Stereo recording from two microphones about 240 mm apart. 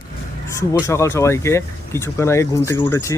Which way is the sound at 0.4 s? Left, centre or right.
Centre.